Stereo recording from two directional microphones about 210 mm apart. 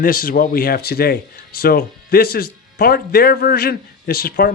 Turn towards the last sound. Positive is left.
turn(degrees=45)  # may be behind; listen again after turning